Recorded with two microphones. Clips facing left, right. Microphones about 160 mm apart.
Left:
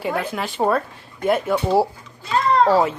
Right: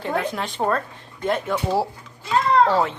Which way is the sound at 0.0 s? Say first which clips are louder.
Left 1 dB; 5° left (ahead or behind).